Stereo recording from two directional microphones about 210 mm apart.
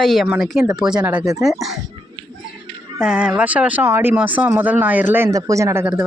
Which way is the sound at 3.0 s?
5° right (ahead or behind).